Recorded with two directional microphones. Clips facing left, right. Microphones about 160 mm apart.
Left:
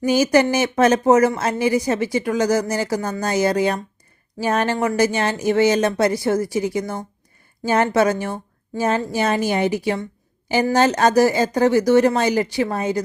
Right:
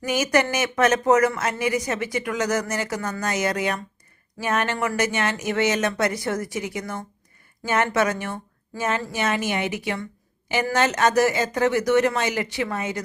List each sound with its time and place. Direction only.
0.0 s speech: 30° left (ahead or behind)